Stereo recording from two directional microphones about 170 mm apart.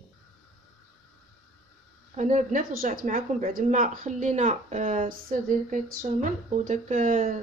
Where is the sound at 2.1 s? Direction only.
50° right (ahead or behind).